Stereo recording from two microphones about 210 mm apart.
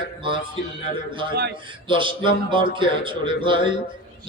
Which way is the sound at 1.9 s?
25° right (ahead or behind).